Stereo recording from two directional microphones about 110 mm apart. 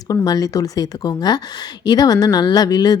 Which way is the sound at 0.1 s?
35° left (ahead or behind).